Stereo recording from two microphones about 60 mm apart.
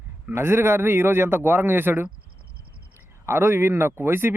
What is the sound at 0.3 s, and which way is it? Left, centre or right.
Speech, right.